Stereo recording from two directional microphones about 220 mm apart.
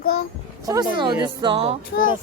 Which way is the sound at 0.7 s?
20° right (ahead or behind).